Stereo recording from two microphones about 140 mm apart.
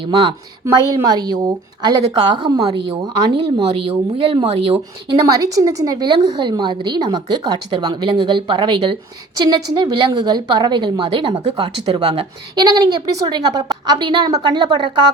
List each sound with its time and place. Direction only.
0.1 s a woman's voice: 35° right (ahead or behind)
5.2 s a woman's voice: 25° right (ahead or behind)